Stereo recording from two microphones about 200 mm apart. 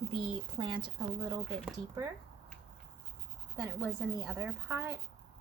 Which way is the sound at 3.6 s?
10° right (ahead or behind).